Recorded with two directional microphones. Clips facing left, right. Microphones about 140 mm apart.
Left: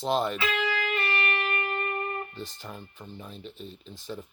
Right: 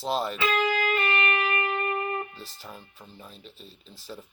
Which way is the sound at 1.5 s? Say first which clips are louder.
Right 3 dB; 50° right (ahead or behind).